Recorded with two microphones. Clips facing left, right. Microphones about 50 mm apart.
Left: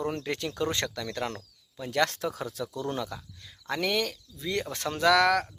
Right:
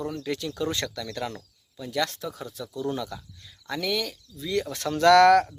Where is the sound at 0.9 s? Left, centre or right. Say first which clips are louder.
Even; left.